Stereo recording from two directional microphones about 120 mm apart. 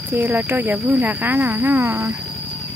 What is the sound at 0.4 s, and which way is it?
Speech, 15° right (ahead or behind).